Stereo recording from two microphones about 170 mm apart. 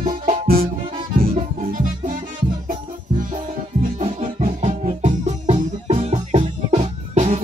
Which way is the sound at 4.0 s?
35° right (ahead or behind).